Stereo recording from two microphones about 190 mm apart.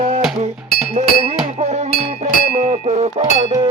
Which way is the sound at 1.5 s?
35° right (ahead or behind).